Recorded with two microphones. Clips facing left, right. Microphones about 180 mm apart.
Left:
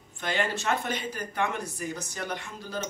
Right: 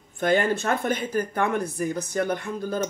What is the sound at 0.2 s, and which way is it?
Speech, 50° right (ahead or behind).